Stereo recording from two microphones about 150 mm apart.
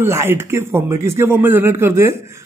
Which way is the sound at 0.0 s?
15° right (ahead or behind).